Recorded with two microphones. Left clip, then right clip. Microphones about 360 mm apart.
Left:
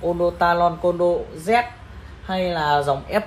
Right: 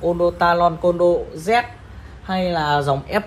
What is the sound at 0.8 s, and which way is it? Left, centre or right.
Speech, right.